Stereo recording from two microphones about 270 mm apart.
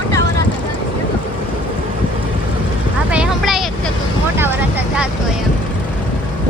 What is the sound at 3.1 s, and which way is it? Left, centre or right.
Vehicle, centre.